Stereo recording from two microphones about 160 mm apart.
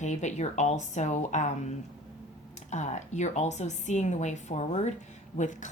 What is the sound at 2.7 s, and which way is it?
A woman's voice, 45° left (ahead or behind).